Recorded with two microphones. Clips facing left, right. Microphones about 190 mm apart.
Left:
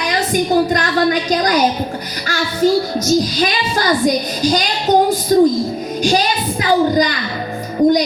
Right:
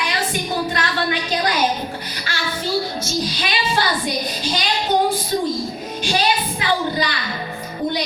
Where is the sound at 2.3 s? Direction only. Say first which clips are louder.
Left 10 dB; 40° left (ahead or behind).